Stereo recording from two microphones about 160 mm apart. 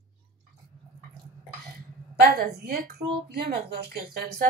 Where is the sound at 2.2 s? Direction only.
75° right (ahead or behind).